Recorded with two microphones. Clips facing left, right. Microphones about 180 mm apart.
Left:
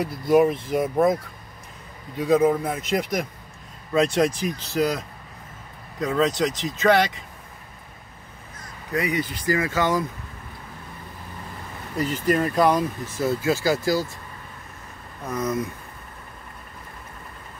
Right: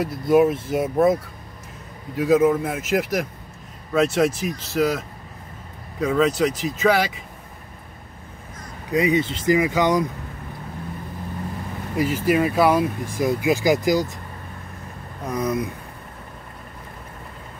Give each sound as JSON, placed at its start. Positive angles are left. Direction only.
{"t": 0.0, "sound": "a man's voice", "side_deg": 0}
{"t": 2.1, "sound": "a man's voice", "side_deg": -5}
{"t": 8.9, "sound": "speech", "side_deg": -20}
{"t": 12.0, "sound": "speech", "side_deg": -10}
{"t": 15.2, "sound": "speech", "side_deg": -15}